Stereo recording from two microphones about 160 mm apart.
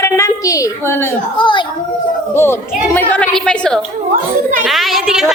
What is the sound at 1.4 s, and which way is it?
Speech, 30° left (ahead or behind).